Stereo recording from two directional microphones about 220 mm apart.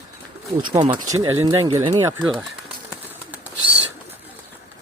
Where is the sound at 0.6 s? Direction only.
20° right (ahead or behind).